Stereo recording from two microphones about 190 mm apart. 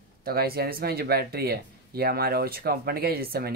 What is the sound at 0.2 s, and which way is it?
Speech, 55° right (ahead or behind).